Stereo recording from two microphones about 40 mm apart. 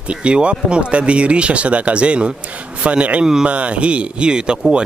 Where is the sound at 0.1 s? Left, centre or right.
Right.